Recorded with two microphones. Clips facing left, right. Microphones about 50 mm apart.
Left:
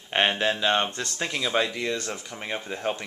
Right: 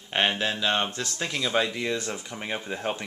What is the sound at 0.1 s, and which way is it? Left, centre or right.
Speech, centre.